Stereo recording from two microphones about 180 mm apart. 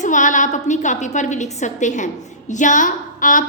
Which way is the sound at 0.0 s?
45° left (ahead or behind).